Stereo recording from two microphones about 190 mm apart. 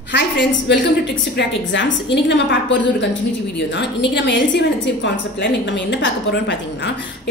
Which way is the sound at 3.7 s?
65° left (ahead or behind).